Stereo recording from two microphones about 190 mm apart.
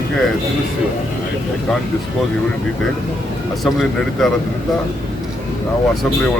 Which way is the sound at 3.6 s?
Centre (ahead or behind).